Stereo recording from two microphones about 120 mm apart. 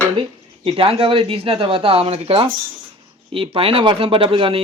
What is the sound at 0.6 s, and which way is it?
A man's voice, 50° right (ahead or behind).